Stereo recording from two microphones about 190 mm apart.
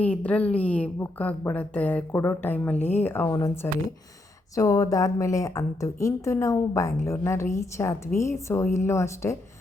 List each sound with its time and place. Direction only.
0.0 s a woman's voice: 5° left (ahead or behind)